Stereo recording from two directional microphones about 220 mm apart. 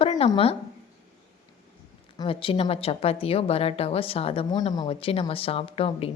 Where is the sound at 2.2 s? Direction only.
25° left (ahead or behind).